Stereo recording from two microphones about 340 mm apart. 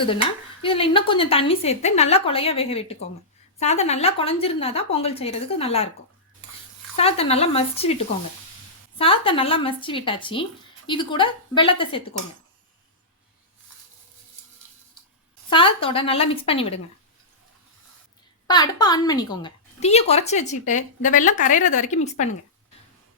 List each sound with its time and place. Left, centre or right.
0.0 s speech: centre
6.9 s speech: centre
15.4 s speech: centre
18.4 s a woman's voice: centre